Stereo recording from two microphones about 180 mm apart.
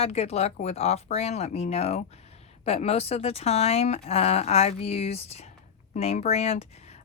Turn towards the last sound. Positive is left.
turn(degrees=35)  # may be behind; listen again after turning